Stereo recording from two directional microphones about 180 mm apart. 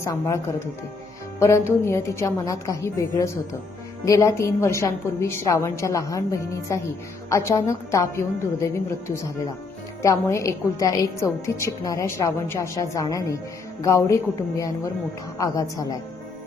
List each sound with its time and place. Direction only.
0.0 s a woman's voice: 15° left (ahead or behind)
15.4 s a woman's voice: 20° left (ahead or behind)